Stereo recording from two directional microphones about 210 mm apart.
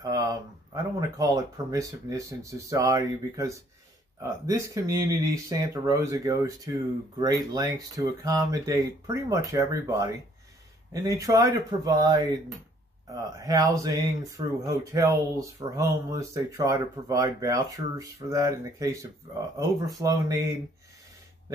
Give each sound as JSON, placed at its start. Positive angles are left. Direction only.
{"t": 1.1, "sound": "speech", "side_deg": -15}